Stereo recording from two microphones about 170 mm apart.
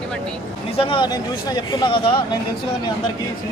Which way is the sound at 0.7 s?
30° left (ahead or behind).